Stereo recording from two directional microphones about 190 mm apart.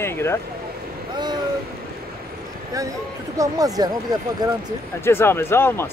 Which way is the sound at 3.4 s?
20° right (ahead or behind).